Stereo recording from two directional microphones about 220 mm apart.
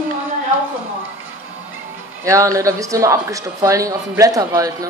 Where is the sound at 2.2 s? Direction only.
15° right (ahead or behind).